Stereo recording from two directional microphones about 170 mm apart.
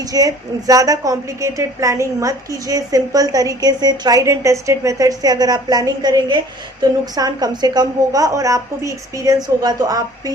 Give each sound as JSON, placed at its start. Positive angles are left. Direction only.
{"t": 0.0, "sound": "a woman's voice", "side_deg": -20}